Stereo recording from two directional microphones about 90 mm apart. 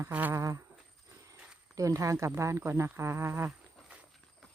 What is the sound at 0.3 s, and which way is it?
Speech, 35° right (ahead or behind).